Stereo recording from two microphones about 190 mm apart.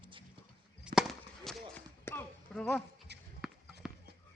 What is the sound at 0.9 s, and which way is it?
Chop, 5° right (ahead or behind).